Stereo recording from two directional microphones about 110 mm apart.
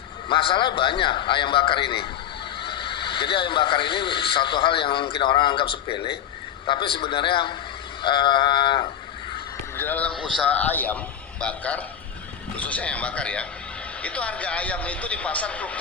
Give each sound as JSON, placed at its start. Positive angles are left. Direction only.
{"t": 0.3, "sound": "speech", "side_deg": 50}
{"t": 9.7, "sound": "speech", "side_deg": 15}